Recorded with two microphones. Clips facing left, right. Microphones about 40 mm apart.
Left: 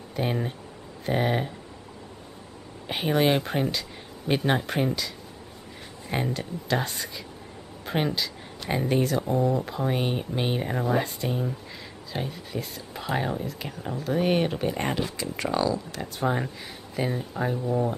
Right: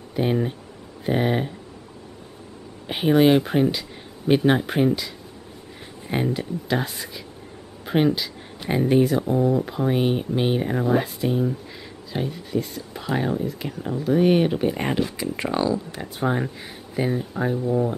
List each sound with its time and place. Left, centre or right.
0.1 s speech: centre
2.9 s speech: centre
15.1 s speech: centre